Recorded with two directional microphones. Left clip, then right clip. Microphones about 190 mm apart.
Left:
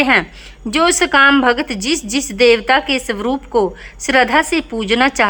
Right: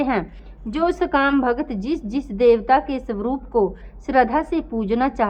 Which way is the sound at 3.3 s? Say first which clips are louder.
Left 4 dB; 40° left (ahead or behind).